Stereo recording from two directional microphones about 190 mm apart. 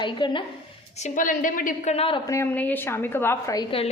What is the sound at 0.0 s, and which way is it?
Speech, 25° left (ahead or behind).